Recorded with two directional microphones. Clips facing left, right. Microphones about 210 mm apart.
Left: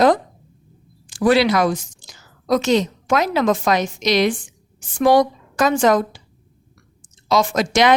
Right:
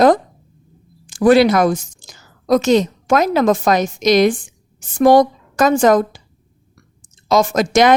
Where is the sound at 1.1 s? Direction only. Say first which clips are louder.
Right 4 dB; 45° right (ahead or behind).